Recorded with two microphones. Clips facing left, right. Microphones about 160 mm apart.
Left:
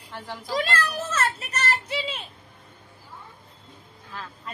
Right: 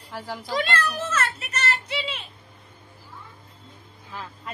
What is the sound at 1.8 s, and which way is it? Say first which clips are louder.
Speech: left 1 dB; 45° left (ahead or behind).